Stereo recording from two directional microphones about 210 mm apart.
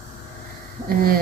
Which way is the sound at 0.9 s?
45° right (ahead or behind).